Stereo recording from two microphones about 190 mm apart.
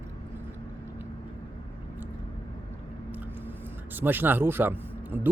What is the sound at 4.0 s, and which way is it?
A man's voice, 10° right (ahead or behind).